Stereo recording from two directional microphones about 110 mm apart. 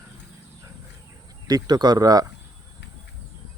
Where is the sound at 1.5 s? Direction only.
35° right (ahead or behind).